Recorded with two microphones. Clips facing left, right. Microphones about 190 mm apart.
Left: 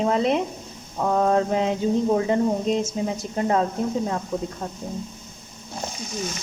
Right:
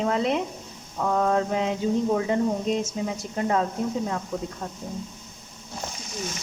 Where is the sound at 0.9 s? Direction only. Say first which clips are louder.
Left 3 dB; 30° left (ahead or behind).